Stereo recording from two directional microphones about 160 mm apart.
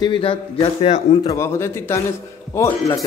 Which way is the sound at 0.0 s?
35° left (ahead or behind).